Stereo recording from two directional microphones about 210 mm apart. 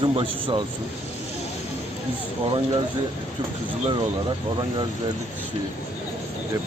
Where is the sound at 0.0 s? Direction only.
25° right (ahead or behind).